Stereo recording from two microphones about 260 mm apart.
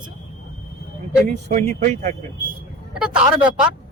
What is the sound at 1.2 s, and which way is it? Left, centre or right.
Speech, right.